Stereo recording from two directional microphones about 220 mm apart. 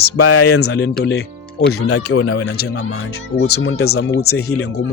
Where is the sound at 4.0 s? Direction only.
50° left (ahead or behind).